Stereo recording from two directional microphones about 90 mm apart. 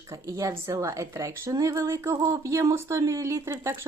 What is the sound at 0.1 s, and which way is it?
Speech, 40° right (ahead or behind).